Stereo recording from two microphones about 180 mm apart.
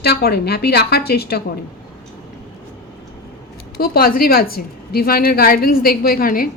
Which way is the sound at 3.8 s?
55° left (ahead or behind).